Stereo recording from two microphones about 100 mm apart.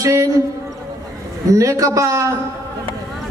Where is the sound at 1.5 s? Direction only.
35° right (ahead or behind).